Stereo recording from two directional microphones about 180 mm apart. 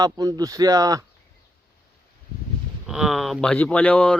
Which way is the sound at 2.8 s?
5° right (ahead or behind).